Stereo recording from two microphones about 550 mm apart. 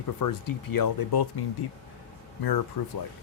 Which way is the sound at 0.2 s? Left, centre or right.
Left.